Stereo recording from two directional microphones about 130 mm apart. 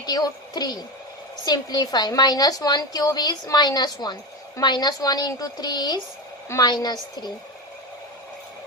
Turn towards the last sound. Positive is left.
turn(degrees=30)  # may be behind; listen again after turning